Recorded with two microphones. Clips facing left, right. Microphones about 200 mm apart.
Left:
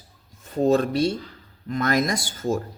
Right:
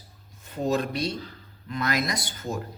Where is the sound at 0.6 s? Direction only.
30° left (ahead or behind).